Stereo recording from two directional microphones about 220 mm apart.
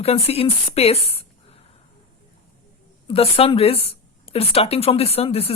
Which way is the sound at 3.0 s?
25° left (ahead or behind).